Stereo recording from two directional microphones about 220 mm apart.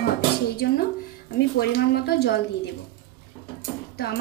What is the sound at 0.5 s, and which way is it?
Dishes, 45° left (ahead or behind).